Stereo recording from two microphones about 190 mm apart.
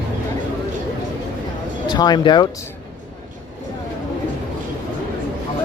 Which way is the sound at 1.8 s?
20° left (ahead or behind).